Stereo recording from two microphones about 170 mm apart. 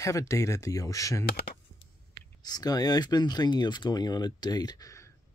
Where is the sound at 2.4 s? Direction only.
25° left (ahead or behind).